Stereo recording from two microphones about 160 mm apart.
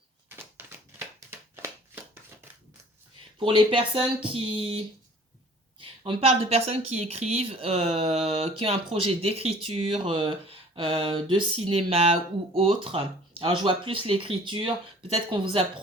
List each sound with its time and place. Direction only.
0.3 s a sound: 15° right (ahead or behind)
3.7 s speech: 35° right (ahead or behind)
5.8 s speech: 35° right (ahead or behind)